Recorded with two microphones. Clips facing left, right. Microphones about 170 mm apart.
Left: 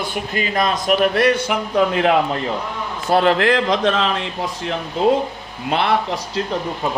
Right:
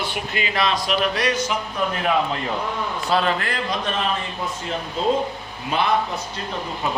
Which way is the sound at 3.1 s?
65° left (ahead or behind).